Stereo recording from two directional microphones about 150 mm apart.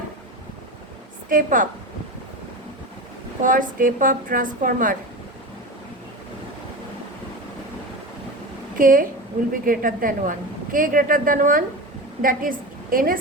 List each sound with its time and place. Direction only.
1.3 s a woman's voice: 60° right (ahead or behind)
3.4 s a woman's voice: 60° right (ahead or behind)
8.8 s a woman's voice: 65° right (ahead or behind)